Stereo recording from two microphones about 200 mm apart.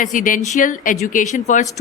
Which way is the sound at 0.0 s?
40° left (ahead or behind).